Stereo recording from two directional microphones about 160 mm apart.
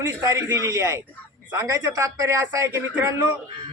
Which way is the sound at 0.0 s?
20° right (ahead or behind).